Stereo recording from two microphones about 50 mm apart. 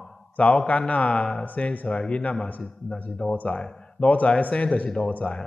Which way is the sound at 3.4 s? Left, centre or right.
Left.